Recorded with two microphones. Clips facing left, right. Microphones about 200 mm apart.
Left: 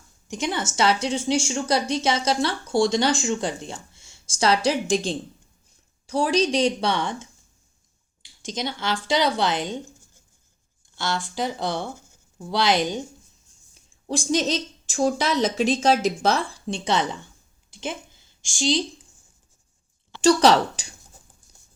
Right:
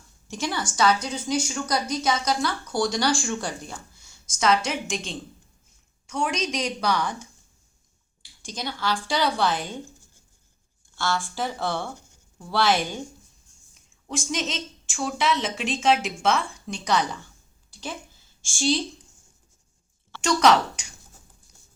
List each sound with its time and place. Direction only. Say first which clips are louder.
0.3 s a woman's voice: left 2 dB; 20° left (ahead or behind)
10.9 s a woman's voice: even; 20° left (ahead or behind)
13.7 s a woman's voice: left 4 dB; 35° left (ahead or behind)
17.7 s a sound: left 4 dB; 20° left (ahead or behind)
20.2 s a woman's voice: left 3 dB; 30° left (ahead or behind)